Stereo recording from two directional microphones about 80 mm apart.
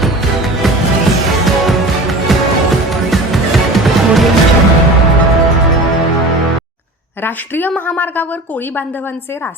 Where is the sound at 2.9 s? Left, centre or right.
Centre.